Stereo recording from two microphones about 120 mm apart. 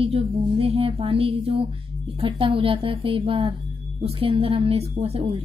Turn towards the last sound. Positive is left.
turn(degrees=-55)  # may be behind; listen again after turning